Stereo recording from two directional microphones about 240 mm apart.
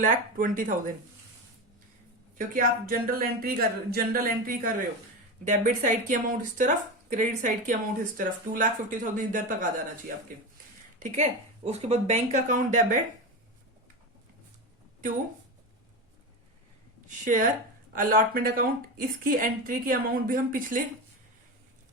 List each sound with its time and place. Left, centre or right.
0.0 s speech: right
2.5 s speech: right
11.0 s a woman's voice: right
17.1 s speech: right